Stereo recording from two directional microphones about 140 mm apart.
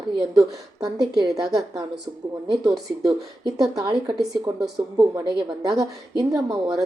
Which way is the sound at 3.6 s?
25° right (ahead or behind).